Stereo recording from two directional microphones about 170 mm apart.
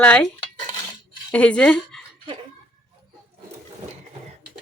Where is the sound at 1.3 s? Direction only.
5° left (ahead or behind).